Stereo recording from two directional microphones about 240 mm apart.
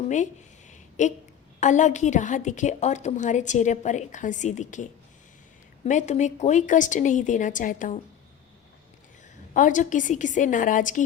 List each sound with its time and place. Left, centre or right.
0.7 s a sound: left
1.5 s a woman's voice: left
9.5 s a woman's voice: left